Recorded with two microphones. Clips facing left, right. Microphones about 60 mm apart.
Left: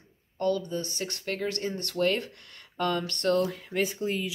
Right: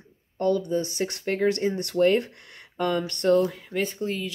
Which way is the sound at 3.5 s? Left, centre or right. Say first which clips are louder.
Right 1 dB; centre.